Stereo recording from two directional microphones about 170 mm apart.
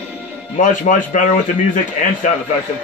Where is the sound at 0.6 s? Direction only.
50° left (ahead or behind).